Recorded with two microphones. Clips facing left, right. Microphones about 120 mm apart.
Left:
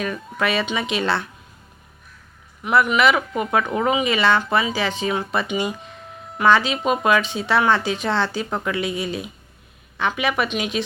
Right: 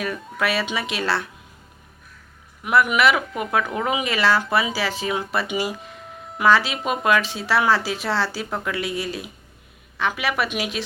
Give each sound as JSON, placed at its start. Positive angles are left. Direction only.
{"t": 0.0, "sound": "speech", "side_deg": 0}
{"t": 2.6, "sound": "speech", "side_deg": -5}